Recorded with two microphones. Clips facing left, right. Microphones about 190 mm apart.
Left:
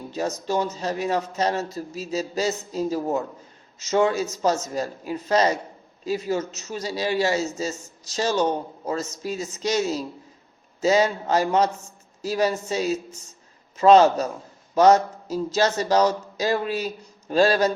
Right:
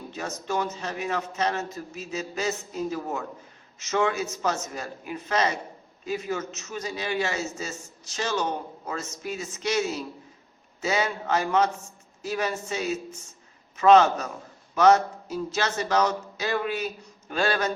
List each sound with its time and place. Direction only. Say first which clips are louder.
0.1 s a man's voice: left 6 dB; 35° left (ahead or behind)